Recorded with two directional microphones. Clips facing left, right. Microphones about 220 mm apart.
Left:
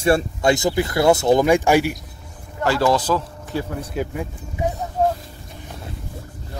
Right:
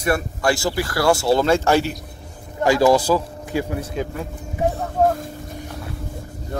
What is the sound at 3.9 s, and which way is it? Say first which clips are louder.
Speech: left 1 dB; 10° left (ahead or behind).